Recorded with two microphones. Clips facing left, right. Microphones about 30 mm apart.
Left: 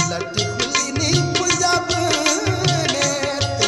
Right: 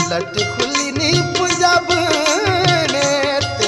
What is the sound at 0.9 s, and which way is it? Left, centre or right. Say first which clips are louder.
Music: right 4 dB; right.